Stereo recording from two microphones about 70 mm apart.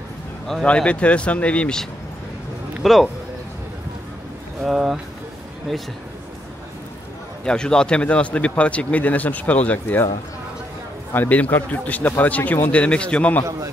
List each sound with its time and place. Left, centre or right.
0.7 s speech: centre
2.8 s speech: centre
4.6 s speech: centre
7.4 s speech: centre
11.1 s speech: left